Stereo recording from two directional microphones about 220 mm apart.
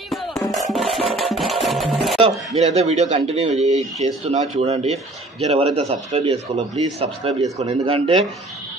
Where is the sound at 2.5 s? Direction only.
30° right (ahead or behind).